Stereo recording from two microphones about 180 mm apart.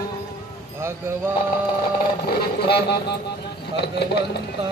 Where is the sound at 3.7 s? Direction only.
65° left (ahead or behind).